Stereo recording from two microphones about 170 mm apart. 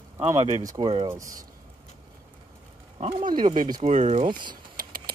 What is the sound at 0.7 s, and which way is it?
Speech, 30° right (ahead or behind).